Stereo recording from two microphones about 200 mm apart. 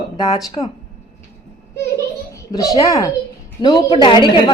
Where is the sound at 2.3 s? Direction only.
15° left (ahead or behind).